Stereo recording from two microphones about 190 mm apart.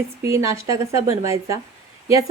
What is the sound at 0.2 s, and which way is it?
Speech, 15° right (ahead or behind).